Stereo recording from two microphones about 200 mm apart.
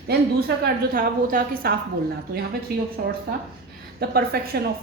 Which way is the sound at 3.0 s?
50° right (ahead or behind).